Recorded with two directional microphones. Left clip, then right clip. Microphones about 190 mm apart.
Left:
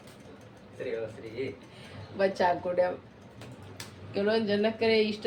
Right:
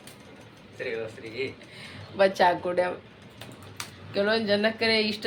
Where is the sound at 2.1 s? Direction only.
30° right (ahead or behind).